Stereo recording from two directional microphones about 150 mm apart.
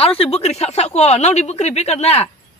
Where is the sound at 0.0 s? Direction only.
40° left (ahead or behind).